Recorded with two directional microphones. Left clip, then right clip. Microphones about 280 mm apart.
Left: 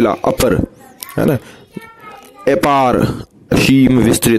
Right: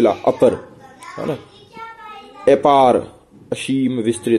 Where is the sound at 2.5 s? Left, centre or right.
Left.